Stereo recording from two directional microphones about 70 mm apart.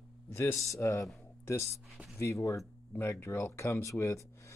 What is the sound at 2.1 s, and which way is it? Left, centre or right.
Speech, left.